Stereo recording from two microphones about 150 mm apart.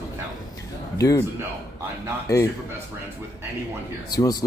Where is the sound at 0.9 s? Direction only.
20° left (ahead or behind).